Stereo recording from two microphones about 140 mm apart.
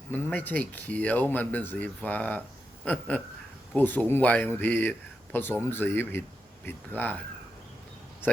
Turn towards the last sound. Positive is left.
turn(degrees=15)  # may be behind; listen again after turning